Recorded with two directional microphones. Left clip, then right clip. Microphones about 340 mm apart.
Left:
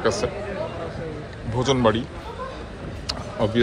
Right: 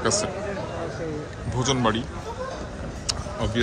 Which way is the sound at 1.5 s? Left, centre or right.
Centre.